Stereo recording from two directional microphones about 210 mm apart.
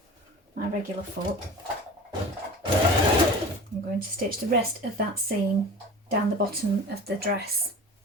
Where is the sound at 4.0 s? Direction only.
45° right (ahead or behind).